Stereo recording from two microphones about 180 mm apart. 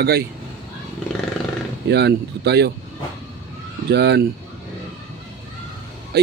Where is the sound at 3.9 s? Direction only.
65° right (ahead or behind).